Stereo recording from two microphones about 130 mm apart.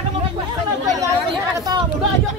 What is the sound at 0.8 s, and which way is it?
Chatter, 30° right (ahead or behind).